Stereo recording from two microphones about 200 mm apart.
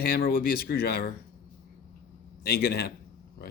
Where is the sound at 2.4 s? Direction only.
50° left (ahead or behind).